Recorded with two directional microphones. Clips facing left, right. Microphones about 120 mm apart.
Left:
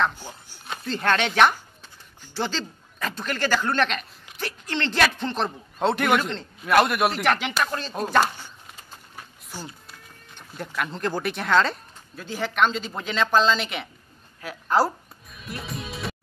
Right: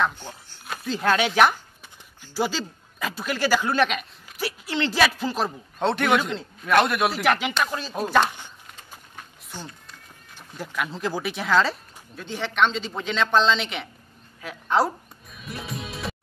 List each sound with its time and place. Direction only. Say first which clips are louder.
0.2 s speech: right 1 dB; 10° left (ahead or behind)
0.7 s a man's voice: right 1 dB; 5° right (ahead or behind)
15.3 s music: even; centre (ahead or behind)